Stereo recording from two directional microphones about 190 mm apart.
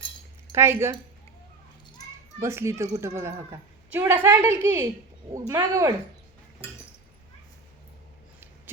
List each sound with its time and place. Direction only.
0.5 s speech: 15° right (ahead or behind)
2.4 s speech: 15° right (ahead or behind)